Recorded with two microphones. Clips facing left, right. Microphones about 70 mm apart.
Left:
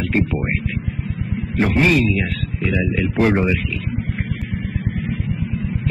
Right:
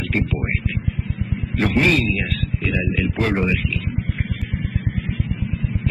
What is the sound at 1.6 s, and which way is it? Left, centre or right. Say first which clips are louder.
A man's voice: left 2 dB; centre.